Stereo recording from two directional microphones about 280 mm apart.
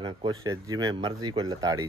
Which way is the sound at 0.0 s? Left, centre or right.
Centre.